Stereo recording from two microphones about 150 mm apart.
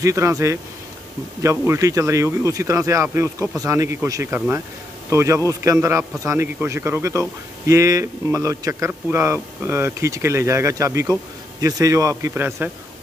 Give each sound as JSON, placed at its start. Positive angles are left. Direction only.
{"t": 0.0, "sound": "speech", "side_deg": -20}